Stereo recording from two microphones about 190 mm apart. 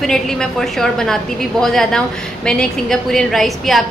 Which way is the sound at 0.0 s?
5° left (ahead or behind).